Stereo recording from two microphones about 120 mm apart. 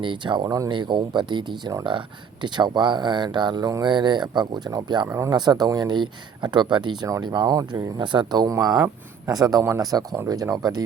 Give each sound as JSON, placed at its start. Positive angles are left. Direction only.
{"t": 0.0, "sound": "speech", "side_deg": -40}
{"t": 5.0, "sound": "speech", "side_deg": -25}